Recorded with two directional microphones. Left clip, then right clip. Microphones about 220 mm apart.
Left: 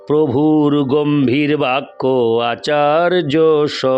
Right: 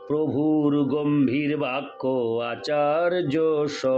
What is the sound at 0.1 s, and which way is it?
A man's voice, 50° left (ahead or behind).